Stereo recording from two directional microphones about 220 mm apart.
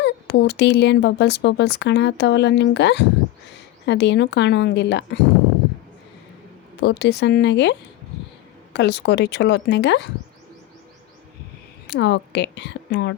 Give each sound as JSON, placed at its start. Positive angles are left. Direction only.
{"t": 0.0, "sound": "speech", "side_deg": 50}
{"t": 6.7, "sound": "speech", "side_deg": 50}
{"t": 11.9, "sound": "a woman's voice", "side_deg": 55}